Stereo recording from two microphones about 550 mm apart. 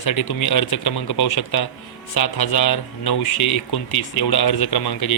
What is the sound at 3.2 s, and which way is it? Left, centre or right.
Speech, left.